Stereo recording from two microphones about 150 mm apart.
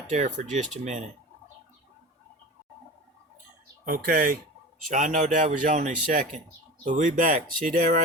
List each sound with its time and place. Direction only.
0.1 s speech: 55° right (ahead or behind)
3.8 s speech: 80° right
4.9 s a man's voice: 60° right (ahead or behind)